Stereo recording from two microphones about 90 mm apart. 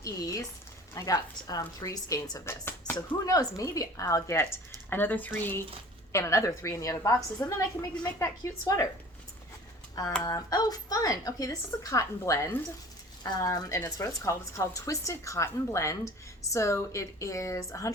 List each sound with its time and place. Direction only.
0.0 s a sound: 40° left (ahead or behind)
0.9 s a woman's voice: 40° left (ahead or behind)
2.4 s speech: 25° left (ahead or behind)
3.2 s a woman's voice: 40° left (ahead or behind); by 5.6 s 20° left (ahead or behind)
6.1 s a woman's voice: 35° left (ahead or behind)
10.2 s a woman's voice: 45° left (ahead or behind)